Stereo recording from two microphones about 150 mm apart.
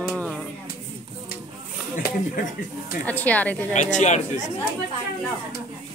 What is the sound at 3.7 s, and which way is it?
Speech, 55° left (ahead or behind).